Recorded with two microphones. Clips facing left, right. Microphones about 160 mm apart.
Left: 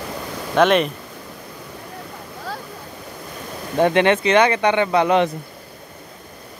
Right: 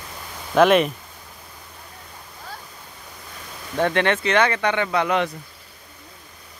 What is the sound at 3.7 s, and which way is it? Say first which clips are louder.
Speech: left 5 dB; 20° left (ahead or behind).